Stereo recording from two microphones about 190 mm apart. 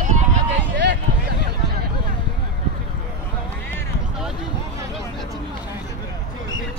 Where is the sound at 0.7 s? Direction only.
65° right (ahead or behind).